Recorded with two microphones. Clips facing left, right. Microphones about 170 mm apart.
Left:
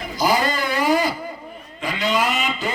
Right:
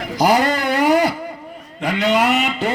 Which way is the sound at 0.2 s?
70° right (ahead or behind).